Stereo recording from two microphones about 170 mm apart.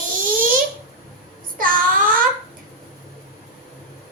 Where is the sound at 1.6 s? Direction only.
55° right (ahead or behind).